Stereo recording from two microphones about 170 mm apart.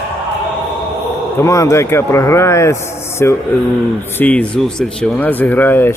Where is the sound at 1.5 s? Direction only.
20° left (ahead or behind).